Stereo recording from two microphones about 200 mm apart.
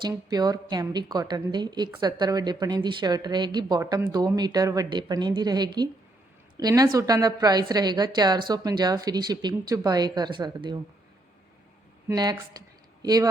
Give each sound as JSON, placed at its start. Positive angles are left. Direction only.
{"t": 0.0, "sound": "a woman's voice", "side_deg": -20}
{"t": 12.0, "sound": "a woman's voice", "side_deg": -20}